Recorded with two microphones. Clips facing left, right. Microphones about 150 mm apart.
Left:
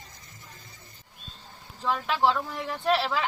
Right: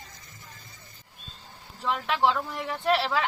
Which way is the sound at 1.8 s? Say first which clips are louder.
Even; centre (ahead or behind).